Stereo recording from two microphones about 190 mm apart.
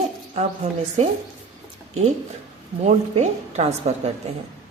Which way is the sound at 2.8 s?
35° right (ahead or behind).